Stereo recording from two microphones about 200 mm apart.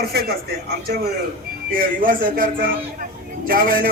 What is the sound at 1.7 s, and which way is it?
A man's voice, 45° right (ahead or behind).